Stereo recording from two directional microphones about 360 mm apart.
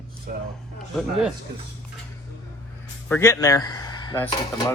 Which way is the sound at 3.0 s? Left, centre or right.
Centre.